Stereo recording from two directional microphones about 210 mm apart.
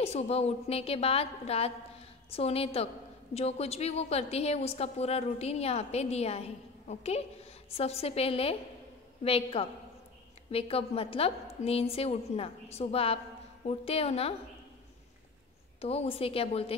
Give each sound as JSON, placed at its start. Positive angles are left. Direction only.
{"t": 0.0, "sound": "a woman's voice", "side_deg": 30}
{"t": 15.8, "sound": "a woman's voice", "side_deg": 30}